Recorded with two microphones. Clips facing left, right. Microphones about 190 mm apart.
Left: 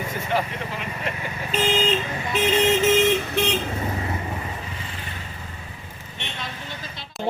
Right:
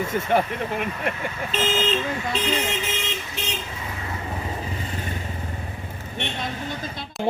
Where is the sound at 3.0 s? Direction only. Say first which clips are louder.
Left 11 dB; 60° left (ahead or behind).